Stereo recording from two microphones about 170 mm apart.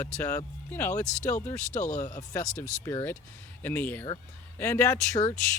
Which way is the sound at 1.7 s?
45° left (ahead or behind).